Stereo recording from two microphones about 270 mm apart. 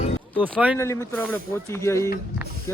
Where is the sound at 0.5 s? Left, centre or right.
Centre.